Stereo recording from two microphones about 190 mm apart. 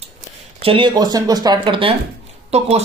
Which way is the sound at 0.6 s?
30° right (ahead or behind).